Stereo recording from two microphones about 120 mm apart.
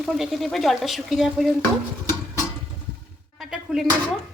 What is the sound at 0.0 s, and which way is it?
Speech, centre (ahead or behind).